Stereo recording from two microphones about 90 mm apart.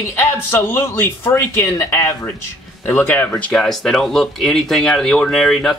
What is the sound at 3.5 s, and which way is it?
Speech, 5° left (ahead or behind).